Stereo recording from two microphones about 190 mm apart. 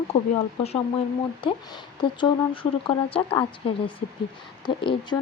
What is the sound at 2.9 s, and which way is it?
Speech, 30° left (ahead or behind).